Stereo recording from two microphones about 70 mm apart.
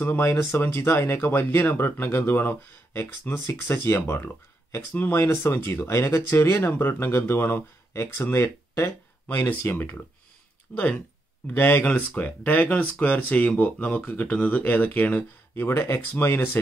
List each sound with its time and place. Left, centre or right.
0.0 s speech: left